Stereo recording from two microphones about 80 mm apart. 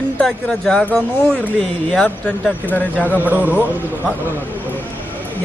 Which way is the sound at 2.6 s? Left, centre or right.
Left.